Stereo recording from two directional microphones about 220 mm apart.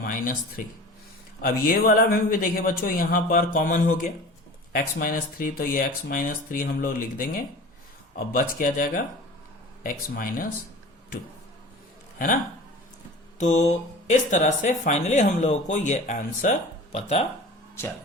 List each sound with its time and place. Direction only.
0.0 s speech: 40° left (ahead or behind)
13.4 s speech: 30° left (ahead or behind)